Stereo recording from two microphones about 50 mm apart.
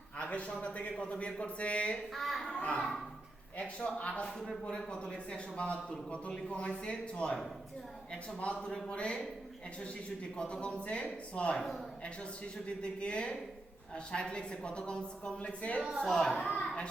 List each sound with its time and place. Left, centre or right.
0.2 s a sound: left
0.5 s speech: left
2.1 s a child's voice: centre
2.6 s speech: left
4.3 s a child's voice: centre
4.9 s speech: left
8.4 s speech: left
8.7 s a child's voice: centre
10.3 s speech: centre
12.6 s speech: left
16.0 s a child's voice: centre
16.5 s a woman's voice: left